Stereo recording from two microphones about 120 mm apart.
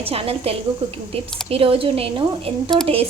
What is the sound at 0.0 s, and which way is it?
A woman's voice, 55° right (ahead or behind).